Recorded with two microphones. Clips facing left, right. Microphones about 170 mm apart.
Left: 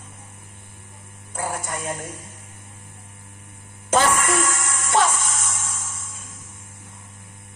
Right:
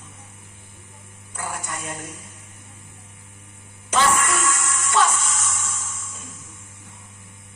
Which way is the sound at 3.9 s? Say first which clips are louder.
Left 1 dB; 50° left (ahead or behind).